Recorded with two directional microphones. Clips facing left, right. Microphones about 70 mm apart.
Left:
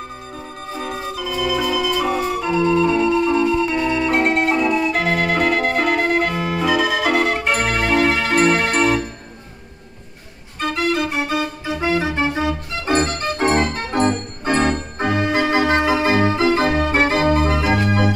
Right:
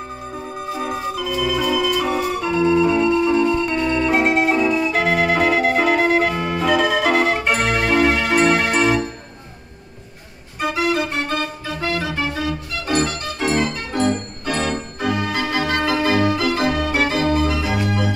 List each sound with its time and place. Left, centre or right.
0.6 s music: centre
10.6 s organ: centre
11.6 s organ: centre; by 18.1 s left